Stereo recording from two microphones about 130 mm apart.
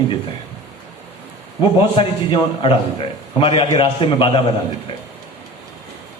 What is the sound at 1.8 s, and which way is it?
A man's voice, 40° left (ahead or behind).